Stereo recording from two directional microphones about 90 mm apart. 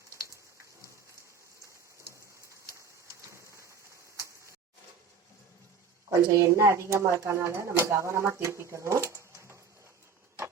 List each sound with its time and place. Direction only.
6.1 s speech: 30° right (ahead or behind)